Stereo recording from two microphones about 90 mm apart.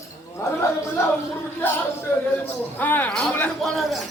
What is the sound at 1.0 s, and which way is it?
Speech, 30° left (ahead or behind).